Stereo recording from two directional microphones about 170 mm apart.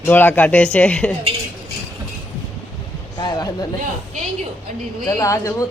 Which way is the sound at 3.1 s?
25° left (ahead or behind).